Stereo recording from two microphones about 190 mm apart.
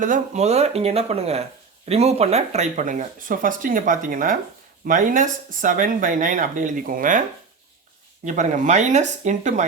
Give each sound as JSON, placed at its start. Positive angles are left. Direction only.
{"t": 0.0, "sound": "speech", "side_deg": -40}
{"t": 8.2, "sound": "speech", "side_deg": -40}